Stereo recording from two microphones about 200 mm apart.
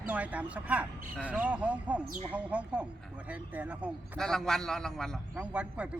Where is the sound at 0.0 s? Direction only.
5° right (ahead or behind).